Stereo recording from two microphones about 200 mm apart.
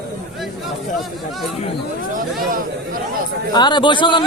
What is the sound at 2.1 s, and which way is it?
Speech, 45° right (ahead or behind).